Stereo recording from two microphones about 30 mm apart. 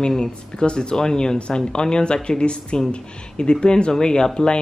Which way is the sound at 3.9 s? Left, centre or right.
Left.